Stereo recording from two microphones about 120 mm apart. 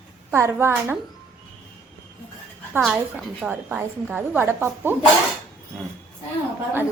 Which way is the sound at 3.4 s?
10° right (ahead or behind).